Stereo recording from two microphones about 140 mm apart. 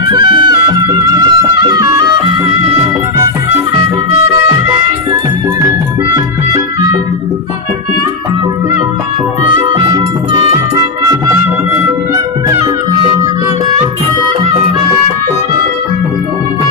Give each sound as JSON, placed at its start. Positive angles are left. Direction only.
{"t": 0.1, "sound": "music", "side_deg": -35}
{"t": 6.1, "sound": "music", "side_deg": -25}
{"t": 10.8, "sound": "music", "side_deg": -25}